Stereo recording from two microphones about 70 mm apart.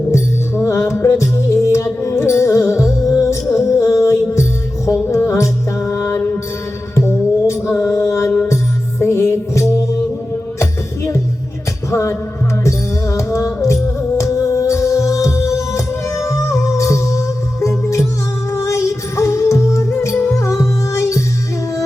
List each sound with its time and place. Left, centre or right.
0.1 s music: left